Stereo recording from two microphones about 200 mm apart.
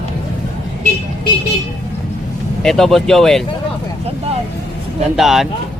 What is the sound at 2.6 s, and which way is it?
Speech, centre (ahead or behind).